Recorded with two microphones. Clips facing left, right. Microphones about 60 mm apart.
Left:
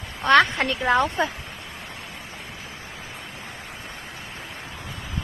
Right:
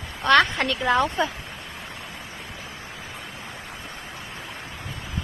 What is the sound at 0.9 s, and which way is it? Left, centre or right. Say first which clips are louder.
Speech: left 1 dB; left.